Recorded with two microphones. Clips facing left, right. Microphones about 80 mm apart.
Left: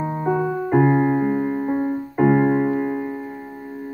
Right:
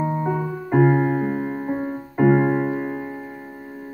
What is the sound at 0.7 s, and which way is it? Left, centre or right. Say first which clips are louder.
Music: even; centre.